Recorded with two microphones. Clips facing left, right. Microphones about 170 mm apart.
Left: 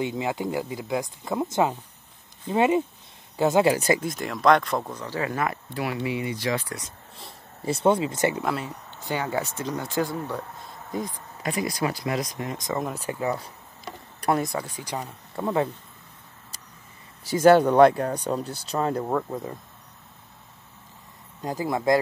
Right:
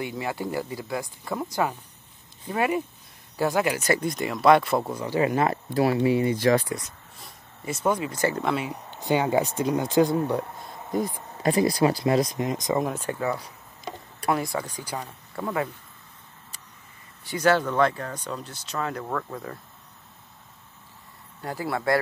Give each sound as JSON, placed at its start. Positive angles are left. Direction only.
{"t": 0.0, "sound": "speech", "side_deg": 20}
{"t": 3.6, "sound": "speech", "side_deg": 35}
{"t": 4.0, "sound": "speech", "side_deg": 0}
{"t": 7.2, "sound": "speech", "side_deg": 30}
{"t": 8.4, "sound": "speech", "side_deg": 5}
{"t": 8.6, "sound": "speech", "side_deg": -15}
{"t": 11.4, "sound": "speech", "side_deg": -30}
{"t": 12.7, "sound": "speech", "side_deg": 0}
{"t": 13.1, "sound": "speech", "side_deg": 25}
{"t": 15.0, "sound": "speech", "side_deg": 10}
{"t": 17.3, "sound": "speech", "side_deg": 50}
{"t": 17.9, "sound": "speech", "side_deg": 35}
{"t": 21.4, "sound": "speech", "side_deg": 20}